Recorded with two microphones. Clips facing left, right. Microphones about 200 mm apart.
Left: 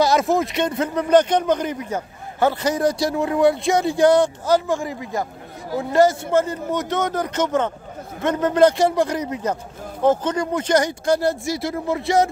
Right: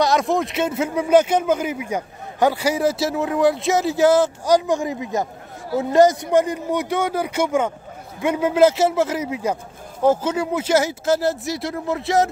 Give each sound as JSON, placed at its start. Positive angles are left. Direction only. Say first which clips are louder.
{"t": 0.0, "sound": "speech", "louder": "left 1 dB", "side_deg": 0}
{"t": 4.5, "sound": "speech", "louder": "right 2 dB", "side_deg": -15}